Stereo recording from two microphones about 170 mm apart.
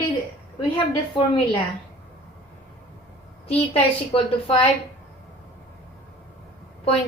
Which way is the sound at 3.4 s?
35° left (ahead or behind).